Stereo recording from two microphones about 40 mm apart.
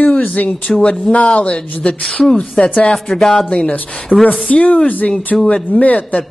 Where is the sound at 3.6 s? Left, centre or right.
Left.